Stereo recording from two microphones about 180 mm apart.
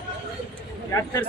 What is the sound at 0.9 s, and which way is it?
Speech, 20° left (ahead or behind).